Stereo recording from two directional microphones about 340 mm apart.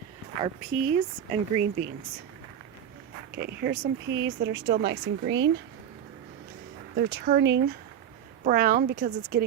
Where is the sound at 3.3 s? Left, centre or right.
Right.